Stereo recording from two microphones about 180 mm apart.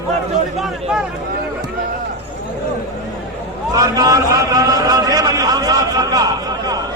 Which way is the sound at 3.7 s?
20° right (ahead or behind).